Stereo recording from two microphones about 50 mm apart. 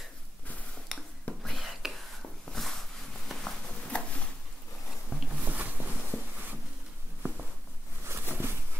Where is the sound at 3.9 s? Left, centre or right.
Left.